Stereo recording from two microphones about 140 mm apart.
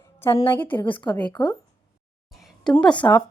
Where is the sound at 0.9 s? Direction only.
30° left (ahead or behind).